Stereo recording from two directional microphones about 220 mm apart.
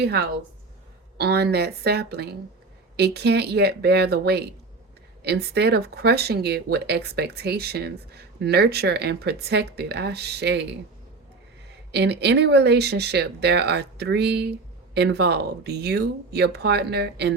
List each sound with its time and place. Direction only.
0.0 s speech: 45° right (ahead or behind)
11.9 s speech: 50° right (ahead or behind)